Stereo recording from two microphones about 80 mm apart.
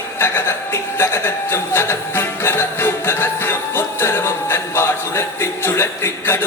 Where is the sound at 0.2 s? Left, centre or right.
Left.